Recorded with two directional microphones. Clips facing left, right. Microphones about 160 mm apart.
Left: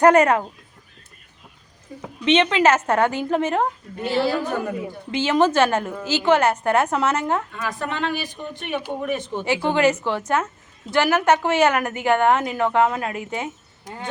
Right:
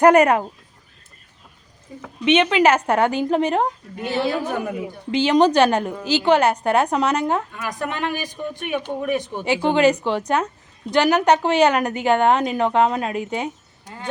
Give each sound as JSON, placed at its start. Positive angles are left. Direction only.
{"t": 0.0, "sound": "a woman's voice", "side_deg": -10}
{"t": 2.2, "sound": "a woman's voice", "side_deg": -10}
{"t": 13.8, "sound": "speech", "side_deg": 20}